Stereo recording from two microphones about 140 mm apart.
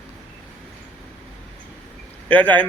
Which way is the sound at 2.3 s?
10° left (ahead or behind).